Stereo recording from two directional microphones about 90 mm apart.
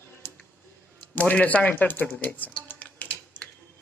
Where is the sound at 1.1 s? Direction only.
15° left (ahead or behind).